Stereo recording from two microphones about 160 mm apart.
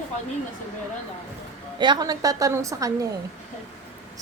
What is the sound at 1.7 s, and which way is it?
A woman's voice, 30° right (ahead or behind).